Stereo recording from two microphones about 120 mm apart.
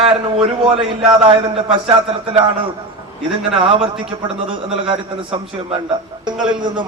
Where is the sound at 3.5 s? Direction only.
50° right (ahead or behind).